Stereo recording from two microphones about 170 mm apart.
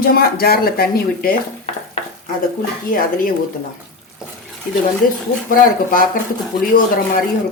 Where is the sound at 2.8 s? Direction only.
55° left (ahead or behind).